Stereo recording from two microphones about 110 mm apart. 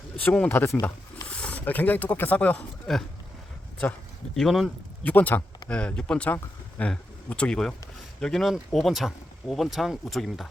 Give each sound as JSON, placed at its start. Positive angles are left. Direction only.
{"t": 0.2, "sound": "speech", "side_deg": 15}
{"t": 1.3, "sound": "speech", "side_deg": 10}
{"t": 4.4, "sound": "speech", "side_deg": 0}
{"t": 5.0, "sound": "speech", "side_deg": 15}